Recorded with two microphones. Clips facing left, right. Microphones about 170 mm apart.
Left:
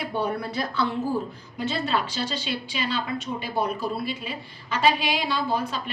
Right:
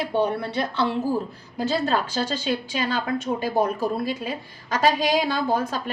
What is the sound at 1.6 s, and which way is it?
A woman's voice, 40° right (ahead or behind).